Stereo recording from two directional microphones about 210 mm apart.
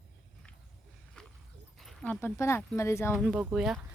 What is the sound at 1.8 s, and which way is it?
Speech, centre (ahead or behind).